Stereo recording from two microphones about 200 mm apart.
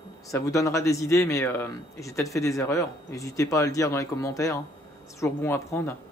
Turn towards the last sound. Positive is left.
turn(degrees=15)  # may be behind; listen again after turning